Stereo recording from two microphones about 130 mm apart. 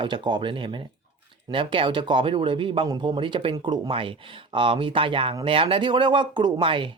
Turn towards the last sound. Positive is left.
turn(degrees=-40)  # may be behind; listen again after turning